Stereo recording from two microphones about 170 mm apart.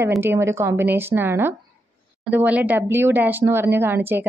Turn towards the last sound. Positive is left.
turn(degrees=-10)  # may be behind; listen again after turning